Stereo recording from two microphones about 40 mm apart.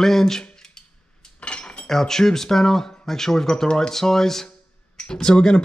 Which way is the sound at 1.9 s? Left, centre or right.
Centre.